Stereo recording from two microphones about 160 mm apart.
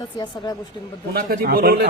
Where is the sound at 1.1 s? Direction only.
65° right (ahead or behind).